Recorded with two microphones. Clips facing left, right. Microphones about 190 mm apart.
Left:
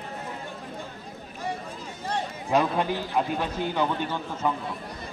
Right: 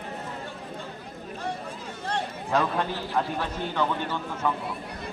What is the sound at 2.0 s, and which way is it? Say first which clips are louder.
A man's voice: even; 10° left (ahead or behind).